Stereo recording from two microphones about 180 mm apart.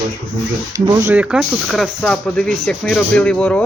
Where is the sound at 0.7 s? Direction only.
20° right (ahead or behind).